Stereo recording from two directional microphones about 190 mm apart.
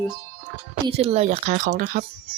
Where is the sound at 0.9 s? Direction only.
30° right (ahead or behind); by 2.1 s 45° right (ahead or behind).